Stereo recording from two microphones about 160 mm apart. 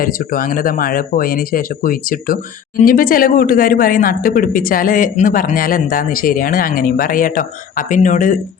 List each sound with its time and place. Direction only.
0.0 s speech: 60° left (ahead or behind)